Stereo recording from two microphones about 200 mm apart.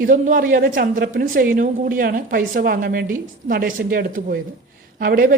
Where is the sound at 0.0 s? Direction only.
45° right (ahead or behind).